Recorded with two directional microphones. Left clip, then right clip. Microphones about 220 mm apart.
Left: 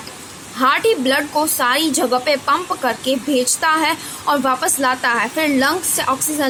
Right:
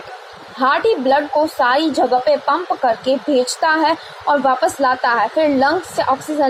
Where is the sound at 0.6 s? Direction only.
30° left (ahead or behind).